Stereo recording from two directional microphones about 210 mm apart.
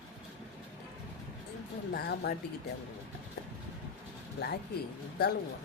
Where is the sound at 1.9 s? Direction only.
50° left (ahead or behind).